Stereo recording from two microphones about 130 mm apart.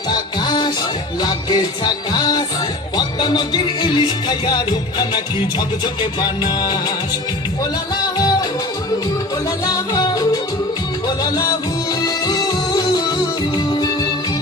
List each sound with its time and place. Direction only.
0.1 s music: 35° left (ahead or behind)
8.1 s music: 30° left (ahead or behind)
9.6 s music: 30° left (ahead or behind)